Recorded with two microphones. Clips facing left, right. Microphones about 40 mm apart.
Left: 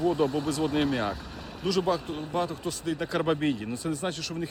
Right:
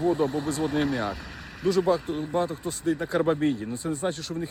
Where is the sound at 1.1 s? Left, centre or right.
Right.